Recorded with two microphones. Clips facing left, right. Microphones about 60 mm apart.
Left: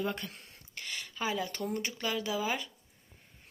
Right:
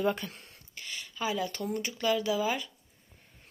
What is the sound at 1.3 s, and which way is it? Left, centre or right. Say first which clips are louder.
Speech: right 2 dB; left.